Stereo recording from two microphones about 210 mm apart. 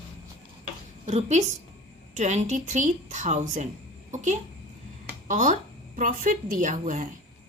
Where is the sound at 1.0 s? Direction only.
35° right (ahead or behind).